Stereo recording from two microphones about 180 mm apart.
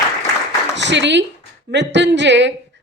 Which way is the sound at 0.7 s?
75° right (ahead or behind).